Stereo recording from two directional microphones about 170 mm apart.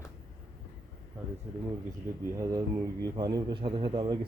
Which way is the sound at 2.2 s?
15° right (ahead or behind).